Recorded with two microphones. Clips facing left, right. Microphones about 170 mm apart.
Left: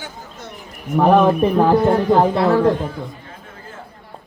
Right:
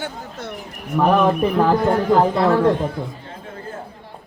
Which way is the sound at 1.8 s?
25° left (ahead or behind).